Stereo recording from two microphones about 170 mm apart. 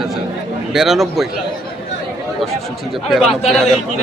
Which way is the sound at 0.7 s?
Centre (ahead or behind).